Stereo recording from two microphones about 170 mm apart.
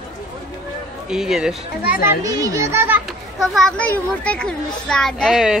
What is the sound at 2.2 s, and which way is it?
Speech, 20° right (ahead or behind).